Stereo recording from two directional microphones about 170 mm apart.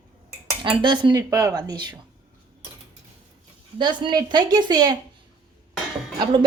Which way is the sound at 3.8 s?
25° right (ahead or behind).